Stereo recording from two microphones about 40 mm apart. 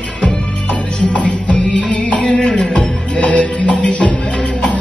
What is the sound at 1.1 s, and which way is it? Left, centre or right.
Music, left.